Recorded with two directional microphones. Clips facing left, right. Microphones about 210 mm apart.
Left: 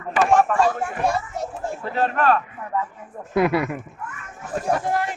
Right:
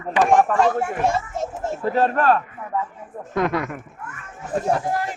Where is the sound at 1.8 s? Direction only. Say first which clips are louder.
Right 3 dB; 40° right (ahead or behind).